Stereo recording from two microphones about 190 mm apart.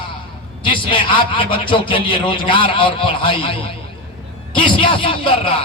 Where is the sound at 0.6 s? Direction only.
25° left (ahead or behind).